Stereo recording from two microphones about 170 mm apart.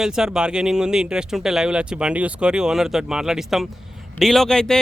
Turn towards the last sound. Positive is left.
turn(degrees=5)  # may be behind; listen again after turning